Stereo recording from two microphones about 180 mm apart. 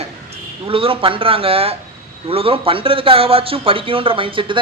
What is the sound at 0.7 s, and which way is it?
Speech, 30° right (ahead or behind).